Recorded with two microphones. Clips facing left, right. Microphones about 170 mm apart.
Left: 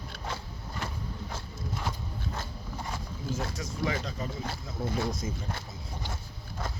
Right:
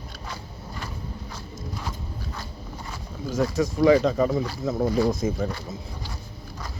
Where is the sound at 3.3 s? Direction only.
90° right.